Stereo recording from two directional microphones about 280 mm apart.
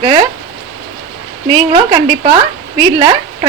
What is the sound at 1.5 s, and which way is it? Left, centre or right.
Speech, centre.